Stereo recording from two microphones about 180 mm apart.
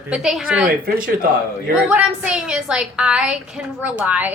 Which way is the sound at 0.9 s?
55° right (ahead or behind).